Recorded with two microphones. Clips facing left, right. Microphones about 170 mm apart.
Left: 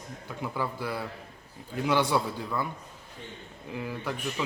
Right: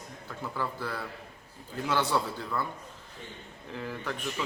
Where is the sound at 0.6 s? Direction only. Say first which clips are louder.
Left 2 dB; 10° left (ahead or behind).